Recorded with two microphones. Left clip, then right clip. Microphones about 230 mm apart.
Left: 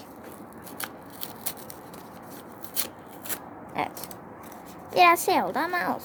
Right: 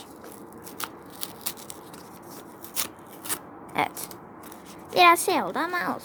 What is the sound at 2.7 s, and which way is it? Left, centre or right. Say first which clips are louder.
Scissors: right 2 dB; right.